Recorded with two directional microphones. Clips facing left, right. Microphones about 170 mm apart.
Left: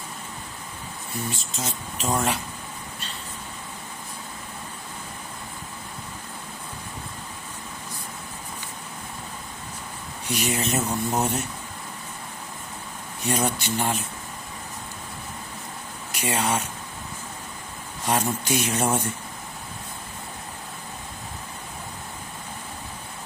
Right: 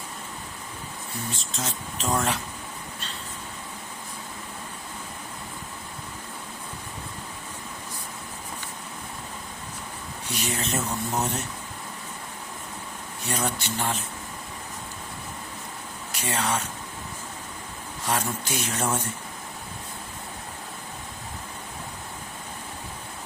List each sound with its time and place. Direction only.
1.5 s speech: 5° left (ahead or behind)
10.2 s speech: 10° left (ahead or behind)
13.2 s speech: 15° left (ahead or behind)
16.2 s speech: 10° left (ahead or behind)
18.0 s speech: 15° left (ahead or behind)